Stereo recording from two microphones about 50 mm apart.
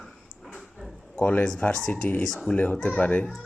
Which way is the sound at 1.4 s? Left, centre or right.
Left.